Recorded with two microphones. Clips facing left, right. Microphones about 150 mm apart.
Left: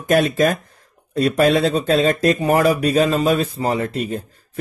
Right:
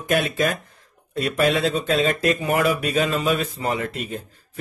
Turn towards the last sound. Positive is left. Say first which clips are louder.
# left 5 dB
turn(degrees=35)  # may be behind; listen again after turning